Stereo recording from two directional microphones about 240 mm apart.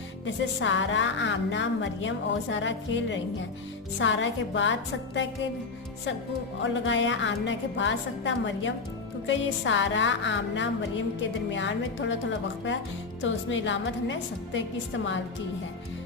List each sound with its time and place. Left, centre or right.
0.3 s a woman's voice: left
6.6 s a woman's voice: left
13.2 s a woman's voice: left